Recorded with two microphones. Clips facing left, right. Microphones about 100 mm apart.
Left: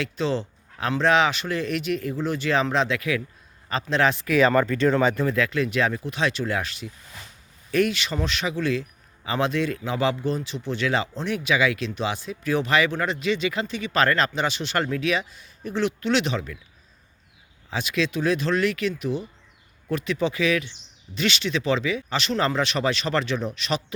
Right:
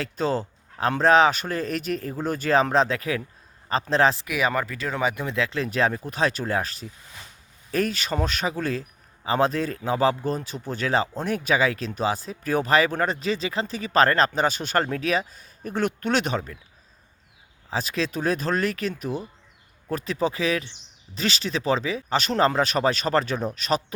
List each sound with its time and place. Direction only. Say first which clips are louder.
0.0 s a man's voice: even; 45° right (ahead or behind)
4.3 s a man's voice: left 6 dB; 10° right (ahead or behind); by 16.6 s 40° right (ahead or behind)
17.7 s a man's voice: left 1 dB; 35° right (ahead or behind)